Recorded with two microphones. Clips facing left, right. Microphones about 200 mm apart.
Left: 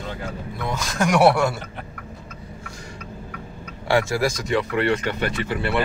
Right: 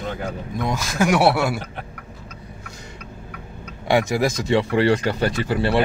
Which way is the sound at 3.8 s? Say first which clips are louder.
Right 2 dB; 20° right (ahead or behind).